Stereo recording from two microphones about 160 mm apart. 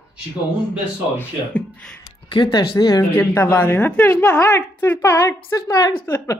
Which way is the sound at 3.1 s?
15° left (ahead or behind).